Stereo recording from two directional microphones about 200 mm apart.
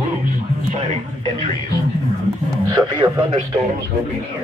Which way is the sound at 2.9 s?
20° right (ahead or behind).